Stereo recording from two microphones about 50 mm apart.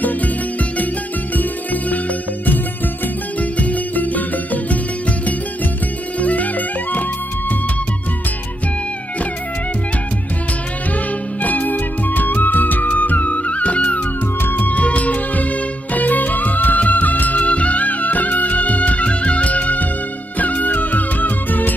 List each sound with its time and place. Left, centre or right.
1.3 s music: left
3.3 s music: left
6.1 s music: left
11.4 s music: left
14.4 s music: left
14.7 s music: left